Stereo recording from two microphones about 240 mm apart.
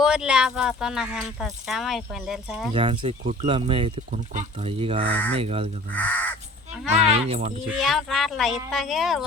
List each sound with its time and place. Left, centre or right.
0.0 s speech: centre
2.7 s speech: right
5.9 s speech: centre
6.9 s speech: right
7.7 s speech: centre